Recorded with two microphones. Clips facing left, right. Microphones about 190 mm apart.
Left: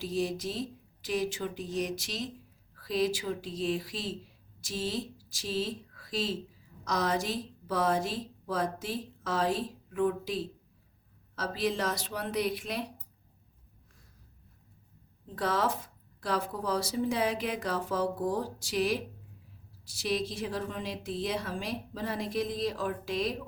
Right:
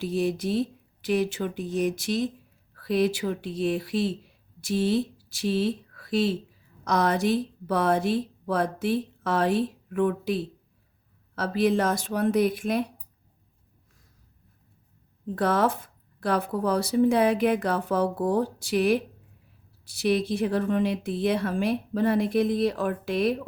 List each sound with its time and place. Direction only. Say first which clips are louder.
0.0 s speech: right 6 dB; 60° right (ahead or behind)
15.4 s speech: right 6 dB; 55° right (ahead or behind)